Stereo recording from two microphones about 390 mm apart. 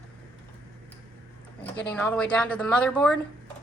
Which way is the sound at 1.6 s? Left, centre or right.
Centre.